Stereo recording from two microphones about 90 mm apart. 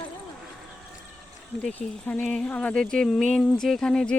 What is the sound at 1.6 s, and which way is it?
Speech, 15° left (ahead or behind).